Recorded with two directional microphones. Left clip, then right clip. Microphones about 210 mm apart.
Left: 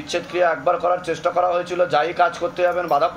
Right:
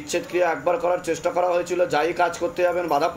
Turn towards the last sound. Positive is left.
turn(degrees=-35)  # may be behind; listen again after turning